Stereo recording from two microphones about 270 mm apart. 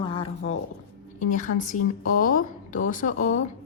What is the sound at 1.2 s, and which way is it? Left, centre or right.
A woman's voice, left.